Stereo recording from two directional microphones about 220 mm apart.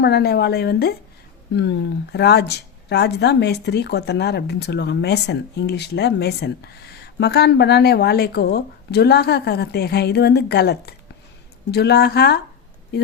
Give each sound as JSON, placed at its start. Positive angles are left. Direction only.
{"t": 0.0, "sound": "speech", "side_deg": 50}